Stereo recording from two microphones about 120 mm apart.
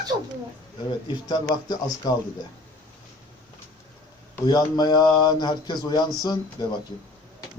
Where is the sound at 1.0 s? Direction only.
35° left (ahead or behind).